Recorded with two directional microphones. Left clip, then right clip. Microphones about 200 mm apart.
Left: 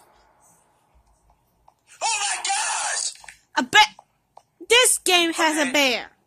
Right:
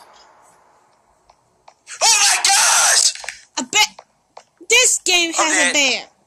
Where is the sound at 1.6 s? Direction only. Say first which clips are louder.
Right 10 dB; 35° right (ahead or behind).